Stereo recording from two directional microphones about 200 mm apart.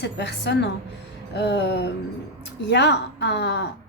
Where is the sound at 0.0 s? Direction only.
60° left (ahead or behind).